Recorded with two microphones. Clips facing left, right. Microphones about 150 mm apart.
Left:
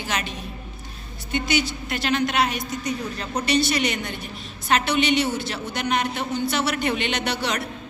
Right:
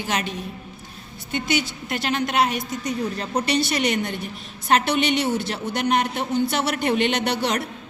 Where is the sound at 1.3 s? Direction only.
55° right (ahead or behind).